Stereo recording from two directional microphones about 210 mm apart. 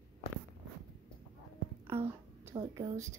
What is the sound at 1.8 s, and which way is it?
A woman's voice, 10° right (ahead or behind).